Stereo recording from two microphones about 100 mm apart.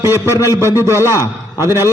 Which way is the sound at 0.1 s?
35° left (ahead or behind).